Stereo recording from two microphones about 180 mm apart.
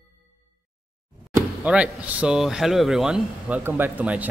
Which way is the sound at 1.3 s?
5° right (ahead or behind).